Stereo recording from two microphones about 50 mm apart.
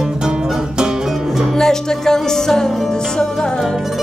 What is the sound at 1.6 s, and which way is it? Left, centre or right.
Music, centre.